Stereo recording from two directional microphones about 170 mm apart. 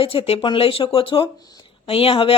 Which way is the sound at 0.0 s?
35° left (ahead or behind).